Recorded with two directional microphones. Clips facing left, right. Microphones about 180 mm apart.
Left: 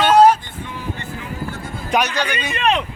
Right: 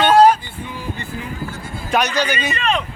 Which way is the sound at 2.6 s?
65° left (ahead or behind).